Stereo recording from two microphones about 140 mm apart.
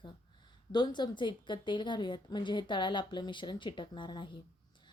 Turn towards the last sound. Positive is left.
turn(degrees=35)  # may be behind; listen again after turning